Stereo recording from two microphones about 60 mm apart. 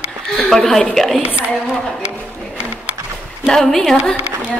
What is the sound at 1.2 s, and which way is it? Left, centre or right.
Speech, right.